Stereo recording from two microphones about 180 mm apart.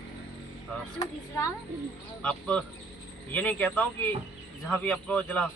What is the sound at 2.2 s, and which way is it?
A man's voice, 5° left (ahead or behind).